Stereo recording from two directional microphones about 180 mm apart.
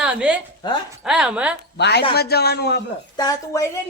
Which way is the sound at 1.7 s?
70° left (ahead or behind).